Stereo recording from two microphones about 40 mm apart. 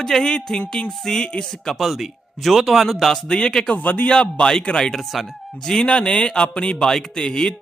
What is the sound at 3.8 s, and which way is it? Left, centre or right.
Speech, left.